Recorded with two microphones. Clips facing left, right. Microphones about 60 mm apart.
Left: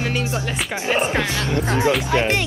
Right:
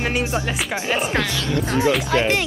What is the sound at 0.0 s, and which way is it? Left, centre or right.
Speech, right.